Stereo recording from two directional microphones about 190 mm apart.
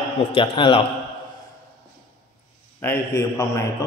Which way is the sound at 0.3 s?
30° left (ahead or behind).